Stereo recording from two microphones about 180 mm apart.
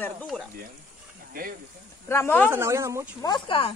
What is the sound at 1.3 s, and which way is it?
Speech, 55° right (ahead or behind).